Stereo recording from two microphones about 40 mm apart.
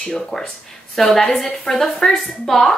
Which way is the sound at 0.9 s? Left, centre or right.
Centre.